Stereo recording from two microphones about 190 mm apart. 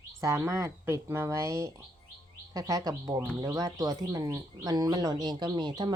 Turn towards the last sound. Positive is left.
turn(degrees=-20)  # may be behind; listen again after turning